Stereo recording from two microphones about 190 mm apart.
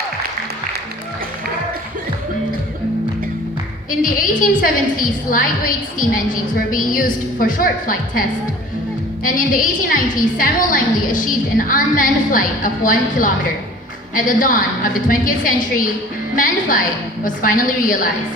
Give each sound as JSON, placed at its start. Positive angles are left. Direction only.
{"t": 3.8, "sound": "a woman's voice", "side_deg": 45}